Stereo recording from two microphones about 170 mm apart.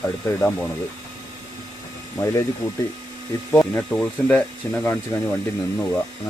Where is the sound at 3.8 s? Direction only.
5° left (ahead or behind).